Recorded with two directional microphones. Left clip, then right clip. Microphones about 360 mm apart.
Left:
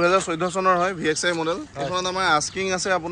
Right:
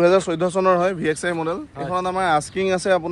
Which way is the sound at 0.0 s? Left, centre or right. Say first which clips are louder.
Right 3 dB; right.